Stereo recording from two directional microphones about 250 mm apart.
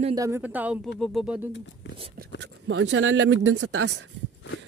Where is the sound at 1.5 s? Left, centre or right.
Left.